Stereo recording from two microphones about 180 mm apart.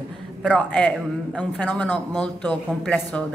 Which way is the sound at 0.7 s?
5° left (ahead or behind).